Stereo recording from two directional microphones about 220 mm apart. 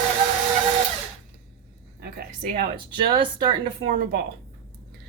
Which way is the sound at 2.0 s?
45° right (ahead or behind).